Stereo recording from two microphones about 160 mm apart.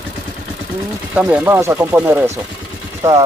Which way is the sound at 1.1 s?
10° right (ahead or behind).